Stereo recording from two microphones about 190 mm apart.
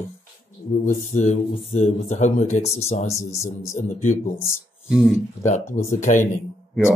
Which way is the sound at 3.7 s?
40° left (ahead or behind).